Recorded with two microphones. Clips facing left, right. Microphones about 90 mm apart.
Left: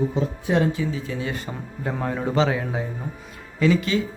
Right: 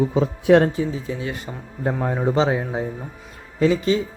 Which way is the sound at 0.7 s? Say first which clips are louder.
Right 2 dB; 35° right (ahead or behind).